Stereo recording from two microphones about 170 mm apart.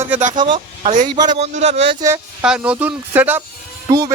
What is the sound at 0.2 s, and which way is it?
Speech, 45° right (ahead or behind).